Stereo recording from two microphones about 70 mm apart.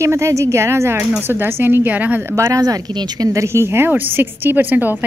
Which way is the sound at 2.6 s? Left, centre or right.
Right.